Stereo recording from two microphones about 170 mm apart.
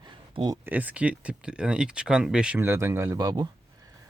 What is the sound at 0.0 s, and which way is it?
Speech, 25° right (ahead or behind).